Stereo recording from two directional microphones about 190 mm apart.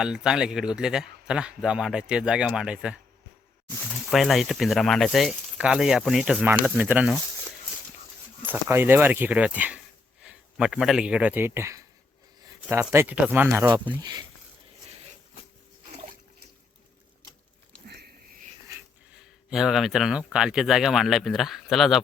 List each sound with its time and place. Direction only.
0.0 s a man's voice: 5° right (ahead or behind)
4.0 s a man's voice: centre (ahead or behind)
8.4 s speech: 10° right (ahead or behind)
17.8 s sniff: 60° right (ahead or behind)
19.1 s a man's voice: 5° right (ahead or behind)